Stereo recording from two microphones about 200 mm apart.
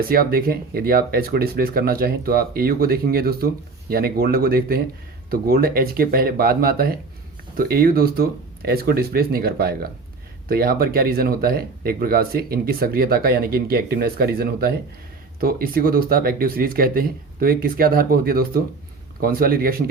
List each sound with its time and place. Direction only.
0.1 s speech: 45° right (ahead or behind)